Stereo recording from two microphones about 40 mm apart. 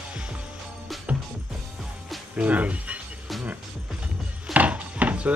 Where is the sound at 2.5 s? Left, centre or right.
Right.